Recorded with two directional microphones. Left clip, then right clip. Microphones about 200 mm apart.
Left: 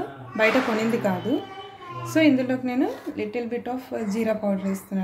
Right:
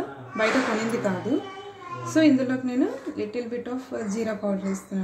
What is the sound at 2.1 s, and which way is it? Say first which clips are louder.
A woman's voice: left 1 dB; 30° left (ahead or behind).